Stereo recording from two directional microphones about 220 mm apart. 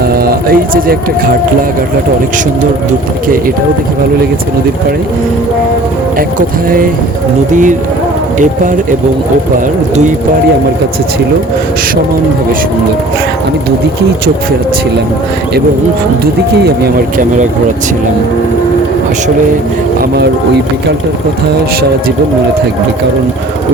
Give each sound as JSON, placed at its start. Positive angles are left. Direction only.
{"t": 0.0, "sound": "speech", "side_deg": -45}
{"t": 7.5, "sound": "speech", "side_deg": -35}
{"t": 16.2, "sound": "speech", "side_deg": -45}